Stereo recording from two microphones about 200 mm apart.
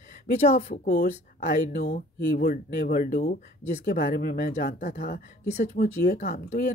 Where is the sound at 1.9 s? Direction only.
40° left (ahead or behind).